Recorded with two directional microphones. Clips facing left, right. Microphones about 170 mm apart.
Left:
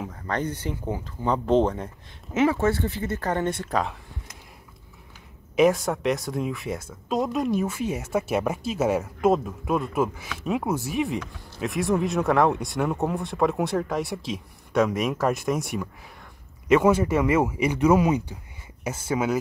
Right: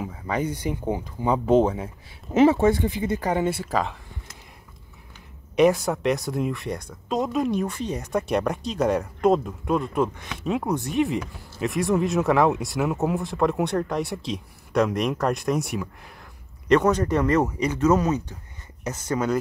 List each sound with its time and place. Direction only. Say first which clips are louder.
0.0 s speech: right 2 dB; 5° right (ahead or behind)
2.3 s speech: right 5 dB; 25° right (ahead or behind)
2.6 s speech: right 3 dB; 15° right (ahead or behind)
5.6 s speech: right 1 dB; centre (ahead or behind)